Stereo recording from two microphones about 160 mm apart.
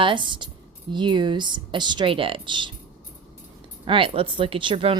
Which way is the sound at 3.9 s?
35° right (ahead or behind).